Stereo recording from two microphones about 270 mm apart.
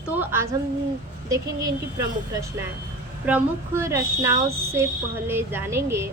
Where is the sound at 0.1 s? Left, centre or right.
Centre.